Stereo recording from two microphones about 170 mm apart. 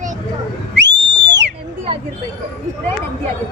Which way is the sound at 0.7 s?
90° right.